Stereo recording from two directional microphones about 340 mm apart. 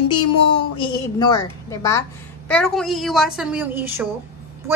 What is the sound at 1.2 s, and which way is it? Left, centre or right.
A woman's voice, centre.